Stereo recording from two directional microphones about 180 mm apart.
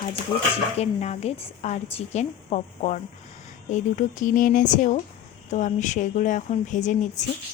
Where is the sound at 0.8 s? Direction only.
35° left (ahead or behind).